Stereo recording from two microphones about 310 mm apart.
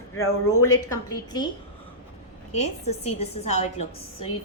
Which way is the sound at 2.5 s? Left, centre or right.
Left.